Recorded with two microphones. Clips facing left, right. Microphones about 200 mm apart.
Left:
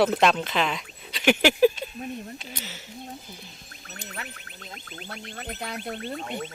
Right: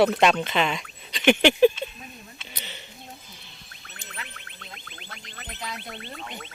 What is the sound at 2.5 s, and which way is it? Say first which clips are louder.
Speech: left 3 dB; centre (ahead or behind).